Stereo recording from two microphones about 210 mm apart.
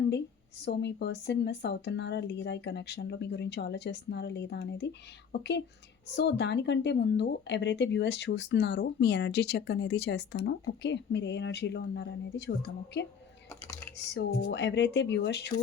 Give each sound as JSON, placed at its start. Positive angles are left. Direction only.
{"t": 0.6, "sound": "speech", "side_deg": 55}
{"t": 13.5, "sound": "typing", "side_deg": 15}
{"t": 13.9, "sound": "speech", "side_deg": 55}